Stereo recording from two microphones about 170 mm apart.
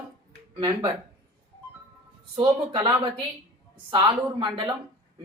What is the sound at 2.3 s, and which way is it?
Speech, 25° right (ahead or behind).